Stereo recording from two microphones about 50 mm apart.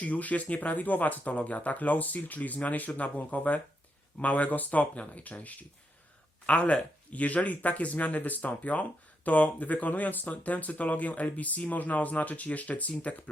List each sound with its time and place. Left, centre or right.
0.0 s speech: left